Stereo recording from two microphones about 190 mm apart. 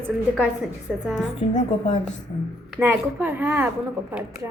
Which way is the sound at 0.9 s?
Centre (ahead or behind).